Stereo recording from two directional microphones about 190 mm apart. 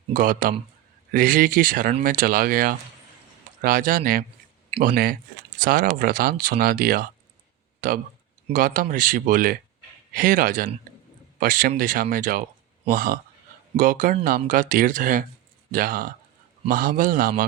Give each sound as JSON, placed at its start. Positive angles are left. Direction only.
{"t": 0.1, "sound": "speech", "side_deg": -45}